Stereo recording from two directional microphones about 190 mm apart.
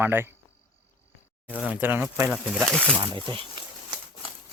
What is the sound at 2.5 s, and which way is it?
Speech, centre (ahead or behind).